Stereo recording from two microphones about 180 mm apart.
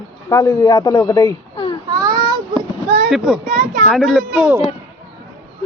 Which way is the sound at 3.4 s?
40° right (ahead or behind).